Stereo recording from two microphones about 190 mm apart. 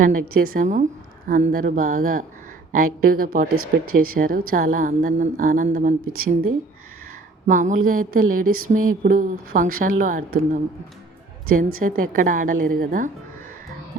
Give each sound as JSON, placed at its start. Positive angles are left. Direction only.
{"t": 0.0, "sound": "a woman's voice", "side_deg": -50}
{"t": 3.5, "sound": "speech", "side_deg": -90}
{"t": 4.1, "sound": "a woman's voice", "side_deg": -45}
{"t": 7.4, "sound": "a woman's voice", "side_deg": -40}
{"t": 11.8, "sound": "a woman's voice", "side_deg": -45}